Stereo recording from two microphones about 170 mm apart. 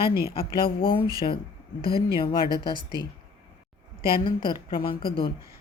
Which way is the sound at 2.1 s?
30° left (ahead or behind).